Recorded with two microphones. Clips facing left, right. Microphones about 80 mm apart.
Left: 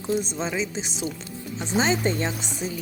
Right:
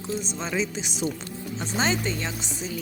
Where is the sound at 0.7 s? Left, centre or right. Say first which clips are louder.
Left 1 dB; left.